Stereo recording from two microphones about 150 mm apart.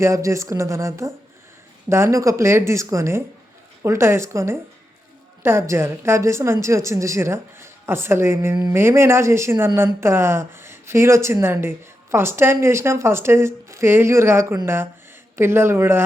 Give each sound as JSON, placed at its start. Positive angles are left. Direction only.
{"t": 0.0, "sound": "a woman's voice", "side_deg": -20}